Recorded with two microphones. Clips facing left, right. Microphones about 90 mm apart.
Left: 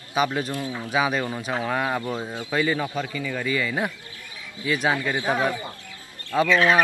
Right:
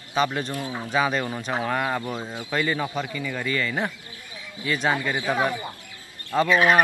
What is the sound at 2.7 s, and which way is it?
Speech, 15° right (ahead or behind).